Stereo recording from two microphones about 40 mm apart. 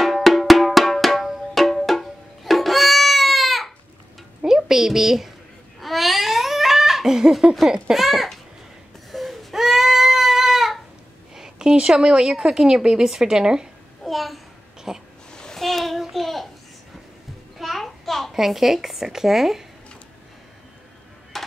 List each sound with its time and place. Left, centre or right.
0.0 s music: centre
4.5 s a woman's voice: centre
5.8 s babbling: centre
7.9 s a child's voice: centre
9.1 s goat: centre
11.3 s a sound: centre
12.0 s a woman's voice: centre
14.0 s a child's voice: centre
14.9 s a woman's voice: centre
15.3 s a sound: centre
15.6 s a child's voice: centre
17.6 s music: centre
18.3 s a woman's voice: centre
21.3 s a sound: centre